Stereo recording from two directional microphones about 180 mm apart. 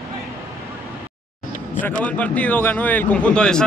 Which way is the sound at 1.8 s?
10° left (ahead or behind).